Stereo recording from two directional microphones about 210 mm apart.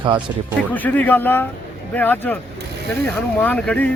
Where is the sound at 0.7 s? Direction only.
10° left (ahead or behind).